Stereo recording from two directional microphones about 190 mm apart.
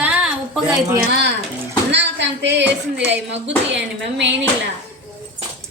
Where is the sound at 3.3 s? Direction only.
70° right (ahead or behind).